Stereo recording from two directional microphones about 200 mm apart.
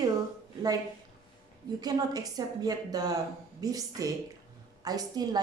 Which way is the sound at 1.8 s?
20° right (ahead or behind).